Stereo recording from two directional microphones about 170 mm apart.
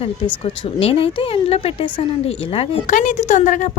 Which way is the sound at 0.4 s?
35° left (ahead or behind).